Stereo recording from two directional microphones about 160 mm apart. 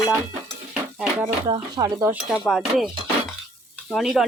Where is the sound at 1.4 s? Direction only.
30° right (ahead or behind).